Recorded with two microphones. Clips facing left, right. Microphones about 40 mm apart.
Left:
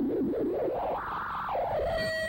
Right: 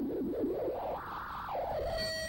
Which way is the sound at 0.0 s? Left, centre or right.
Left.